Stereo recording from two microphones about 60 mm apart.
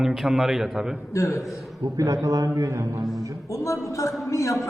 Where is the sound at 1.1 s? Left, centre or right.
Left.